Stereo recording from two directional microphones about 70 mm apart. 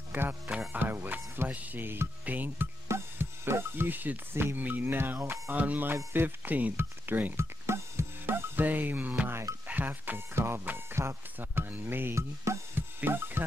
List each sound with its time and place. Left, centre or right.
0.1 s music: right
0.7 s speech: right
2.9 s speech: right
7.3 s music: right
9.3 s speech: right
9.7 s speech: right
12.7 s music: right